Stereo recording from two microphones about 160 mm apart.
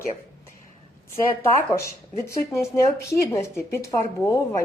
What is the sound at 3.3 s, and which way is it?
Speech, 15° left (ahead or behind).